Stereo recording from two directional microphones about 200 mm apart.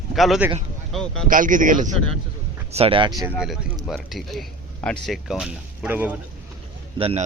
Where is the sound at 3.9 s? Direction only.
Centre (ahead or behind).